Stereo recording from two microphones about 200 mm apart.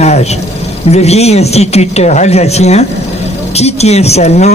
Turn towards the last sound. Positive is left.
turn(degrees=35)  # may be behind; listen again after turning